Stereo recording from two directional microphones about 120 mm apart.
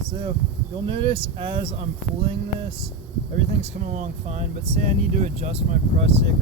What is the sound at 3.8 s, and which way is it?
Speech, 85° right.